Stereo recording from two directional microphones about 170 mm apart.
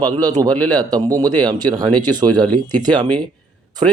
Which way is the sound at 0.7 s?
25° right (ahead or behind).